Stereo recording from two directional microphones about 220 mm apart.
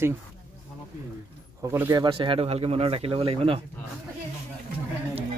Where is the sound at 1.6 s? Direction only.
10° right (ahead or behind).